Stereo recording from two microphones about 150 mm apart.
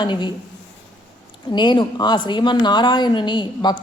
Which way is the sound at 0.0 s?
30° left (ahead or behind).